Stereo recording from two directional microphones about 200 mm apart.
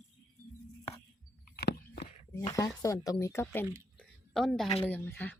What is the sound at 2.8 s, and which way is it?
Speech, 15° left (ahead or behind).